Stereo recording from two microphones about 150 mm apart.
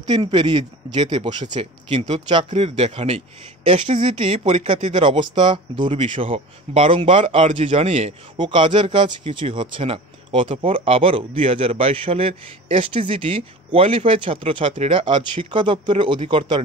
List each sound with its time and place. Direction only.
0.0 s a man's voice: 30° right (ahead or behind)
2.0 s a man's voice: 45° right (ahead or behind)